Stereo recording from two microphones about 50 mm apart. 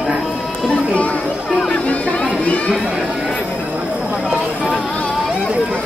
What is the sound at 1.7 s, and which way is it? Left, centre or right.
Music, left.